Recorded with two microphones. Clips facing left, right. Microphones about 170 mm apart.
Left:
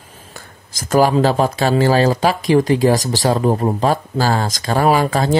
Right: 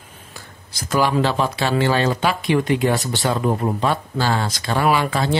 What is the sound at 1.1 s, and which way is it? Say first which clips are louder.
Speech: left 5 dB; 40° left (ahead or behind).